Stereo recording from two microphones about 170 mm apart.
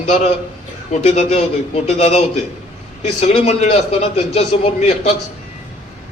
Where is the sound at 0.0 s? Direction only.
35° left (ahead or behind).